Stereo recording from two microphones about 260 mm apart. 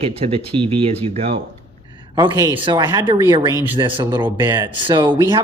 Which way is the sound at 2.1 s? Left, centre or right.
Centre.